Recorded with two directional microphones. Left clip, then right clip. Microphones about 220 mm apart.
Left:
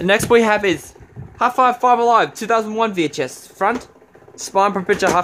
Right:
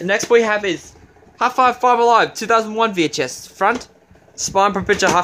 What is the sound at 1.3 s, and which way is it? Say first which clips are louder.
Speech: even; 5° left (ahead or behind).